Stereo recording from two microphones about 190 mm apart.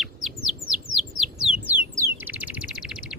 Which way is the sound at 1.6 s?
15° right (ahead or behind).